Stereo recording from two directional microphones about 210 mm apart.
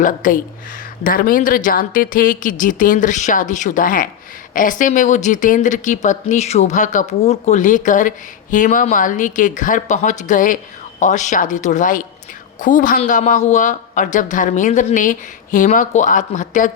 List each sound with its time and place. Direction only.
0.0 s speech: 40° left (ahead or behind)